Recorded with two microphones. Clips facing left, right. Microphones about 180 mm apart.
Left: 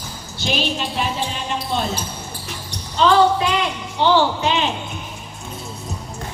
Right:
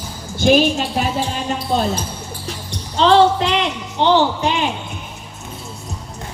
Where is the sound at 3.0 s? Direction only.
30° right (ahead or behind).